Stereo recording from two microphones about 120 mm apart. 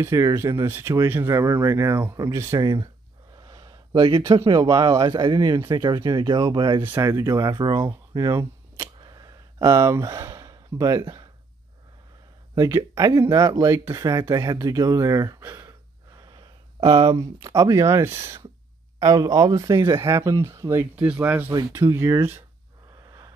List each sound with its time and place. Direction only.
0.0 s speech: 25° right (ahead or behind)
3.4 s a sound: 35° right (ahead or behind)
4.6 s speech: 30° right (ahead or behind)
6.8 s speech: 20° right (ahead or behind)
9.0 s a sound: 35° right (ahead or behind)
12.5 s speech: 25° right (ahead or behind)
16.8 s speech: 50° right (ahead or behind)
17.2 s speech: 25° right (ahead or behind)
20.9 s speech: 10° right (ahead or behind)
23.0 s a sound: 30° right (ahead or behind)